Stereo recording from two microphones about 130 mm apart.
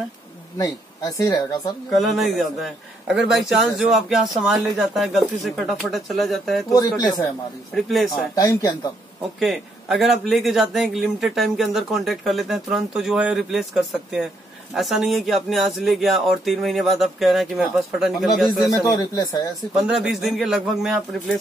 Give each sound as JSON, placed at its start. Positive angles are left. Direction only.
{"t": 0.6, "sound": "speech", "side_deg": 25}
{"t": 1.9, "sound": "speech", "side_deg": 0}
{"t": 6.7, "sound": "speech", "side_deg": 30}
{"t": 7.7, "sound": "speech", "side_deg": 0}
{"t": 8.4, "sound": "speech", "side_deg": 25}
{"t": 9.4, "sound": "speech", "side_deg": 0}
{"t": 18.7, "sound": "speech", "side_deg": 25}
{"t": 19.8, "sound": "speech", "side_deg": 0}